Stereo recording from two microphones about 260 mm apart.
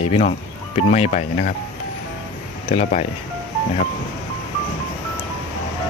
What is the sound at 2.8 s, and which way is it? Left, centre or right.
Speech, left.